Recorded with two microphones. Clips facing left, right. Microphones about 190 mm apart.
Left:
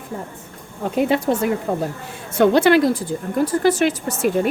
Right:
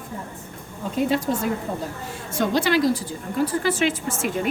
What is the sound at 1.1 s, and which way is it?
A woman's voice, 65° left (ahead or behind).